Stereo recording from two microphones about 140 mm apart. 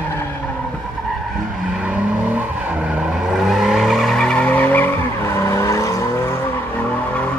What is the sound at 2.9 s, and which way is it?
Vehicle, 5° right (ahead or behind).